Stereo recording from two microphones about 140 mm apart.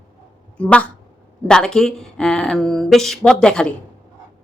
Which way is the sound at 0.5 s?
10° left (ahead or behind).